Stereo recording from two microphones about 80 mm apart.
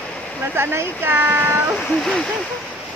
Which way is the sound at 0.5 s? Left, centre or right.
Right.